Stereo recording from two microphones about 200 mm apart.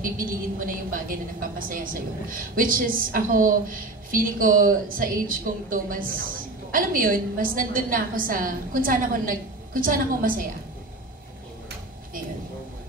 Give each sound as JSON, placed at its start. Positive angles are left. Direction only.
{"t": 0.0, "sound": "a woman's voice", "side_deg": -45}